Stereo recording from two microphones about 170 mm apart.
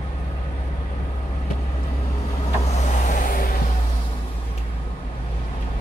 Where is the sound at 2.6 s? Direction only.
40° left (ahead or behind).